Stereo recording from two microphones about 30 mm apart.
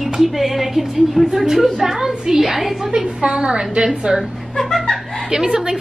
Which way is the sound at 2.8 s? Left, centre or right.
Right.